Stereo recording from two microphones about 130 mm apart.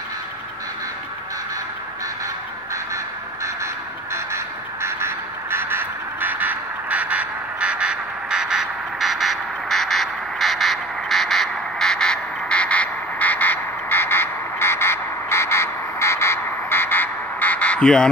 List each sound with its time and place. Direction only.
3.4 s vehicle: 20° right (ahead or behind)
4.8 s quack: 20° right (ahead or behind); by 18.1 s 5° left (ahead or behind)